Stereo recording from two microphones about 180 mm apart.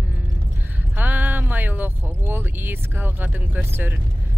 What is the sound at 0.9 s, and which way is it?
Speech, 10° right (ahead or behind).